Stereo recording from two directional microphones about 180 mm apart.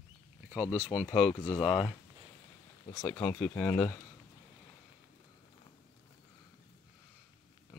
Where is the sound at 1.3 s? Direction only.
25° left (ahead or behind).